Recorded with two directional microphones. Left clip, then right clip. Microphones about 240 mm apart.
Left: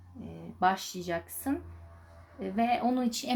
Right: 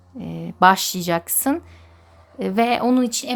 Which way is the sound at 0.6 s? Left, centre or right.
Right.